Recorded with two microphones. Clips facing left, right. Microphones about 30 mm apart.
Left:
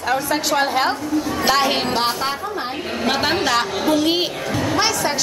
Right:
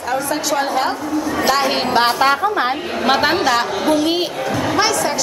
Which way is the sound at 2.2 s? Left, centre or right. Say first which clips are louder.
Right 8 dB; right.